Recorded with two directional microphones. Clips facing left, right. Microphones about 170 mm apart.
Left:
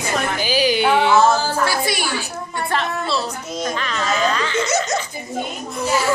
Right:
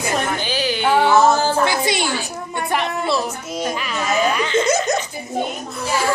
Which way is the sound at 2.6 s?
15° right (ahead or behind).